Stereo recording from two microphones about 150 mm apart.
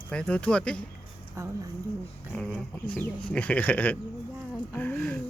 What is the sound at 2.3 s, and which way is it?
Speech, 5° left (ahead or behind).